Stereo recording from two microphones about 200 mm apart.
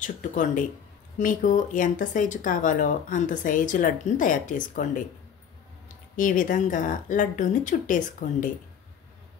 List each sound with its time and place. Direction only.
0.0 s speech: 40° left (ahead or behind)
6.1 s speech: 40° left (ahead or behind)